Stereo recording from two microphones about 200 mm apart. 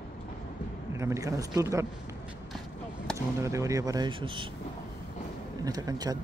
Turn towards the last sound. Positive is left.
turn(degrees=-20)  # may be behind; listen again after turning